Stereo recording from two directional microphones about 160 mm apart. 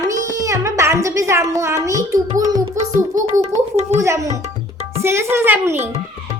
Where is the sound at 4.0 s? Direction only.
20° right (ahead or behind).